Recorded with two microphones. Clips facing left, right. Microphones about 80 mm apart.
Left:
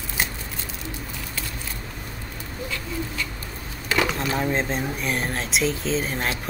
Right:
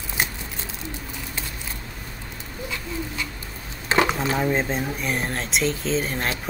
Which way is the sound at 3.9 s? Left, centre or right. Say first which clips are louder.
Right 3 dB; right.